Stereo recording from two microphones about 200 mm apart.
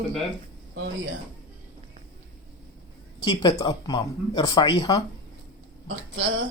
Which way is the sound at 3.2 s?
25° left (ahead or behind).